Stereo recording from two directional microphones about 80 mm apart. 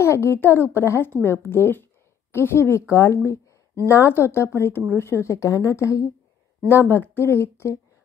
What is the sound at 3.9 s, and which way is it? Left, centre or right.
A woman's voice, left.